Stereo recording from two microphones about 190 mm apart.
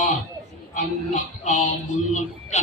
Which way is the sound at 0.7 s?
40° left (ahead or behind).